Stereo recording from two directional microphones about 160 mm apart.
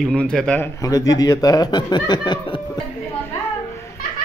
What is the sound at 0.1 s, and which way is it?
Speech, 5° left (ahead or behind).